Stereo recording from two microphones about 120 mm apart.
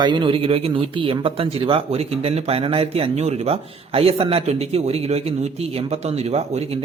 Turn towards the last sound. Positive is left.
turn(degrees=-60)  # may be behind; listen again after turning